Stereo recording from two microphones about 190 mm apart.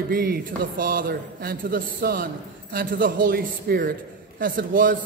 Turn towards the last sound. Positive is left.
turn(degrees=-45)  # may be behind; listen again after turning